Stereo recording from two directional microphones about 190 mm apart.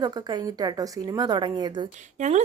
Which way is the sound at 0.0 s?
20° right (ahead or behind).